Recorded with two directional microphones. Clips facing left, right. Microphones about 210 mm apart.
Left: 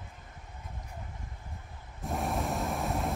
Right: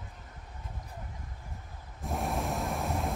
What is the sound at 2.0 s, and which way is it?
Vehicle, centre (ahead or behind).